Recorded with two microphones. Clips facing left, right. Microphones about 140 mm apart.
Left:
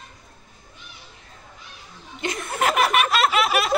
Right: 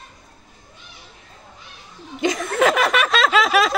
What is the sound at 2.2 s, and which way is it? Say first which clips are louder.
Snicker: right 6 dB; 90° right.